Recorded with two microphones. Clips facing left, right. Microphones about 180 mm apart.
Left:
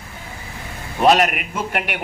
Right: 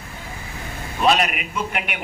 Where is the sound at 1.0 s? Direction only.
50° left (ahead or behind).